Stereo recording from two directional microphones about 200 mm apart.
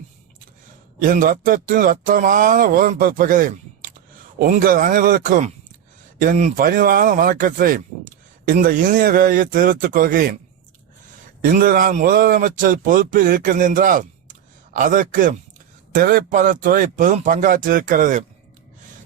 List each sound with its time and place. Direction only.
1.0 s speech: 45° right (ahead or behind)
11.4 s speech: 45° right (ahead or behind)